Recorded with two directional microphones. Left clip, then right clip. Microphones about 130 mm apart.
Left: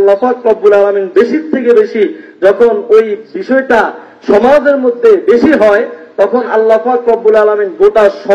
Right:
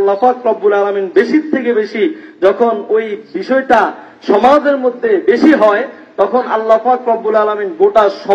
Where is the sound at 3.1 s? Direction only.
30° right (ahead or behind).